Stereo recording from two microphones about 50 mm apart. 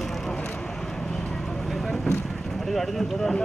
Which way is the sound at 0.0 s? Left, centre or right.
Centre.